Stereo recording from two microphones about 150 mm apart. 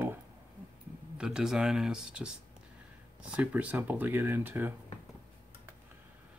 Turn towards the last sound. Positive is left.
turn(degrees=-15)  # may be behind; listen again after turning